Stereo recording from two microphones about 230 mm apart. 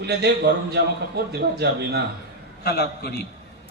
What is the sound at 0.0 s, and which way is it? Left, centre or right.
A man's voice, right.